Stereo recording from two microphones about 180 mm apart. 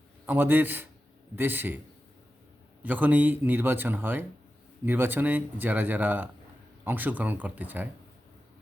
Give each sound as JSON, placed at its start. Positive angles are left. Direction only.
{"t": 0.3, "sound": "speech", "side_deg": -10}
{"t": 2.8, "sound": "speech", "side_deg": -10}